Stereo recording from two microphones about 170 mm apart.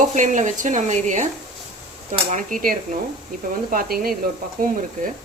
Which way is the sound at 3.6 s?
60° right (ahead or behind).